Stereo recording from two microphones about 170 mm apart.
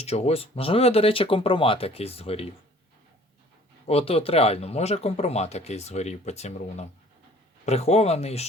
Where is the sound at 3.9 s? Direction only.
35° left (ahead or behind).